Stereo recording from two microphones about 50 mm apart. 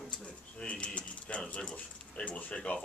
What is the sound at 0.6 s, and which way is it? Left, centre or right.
Speech, left.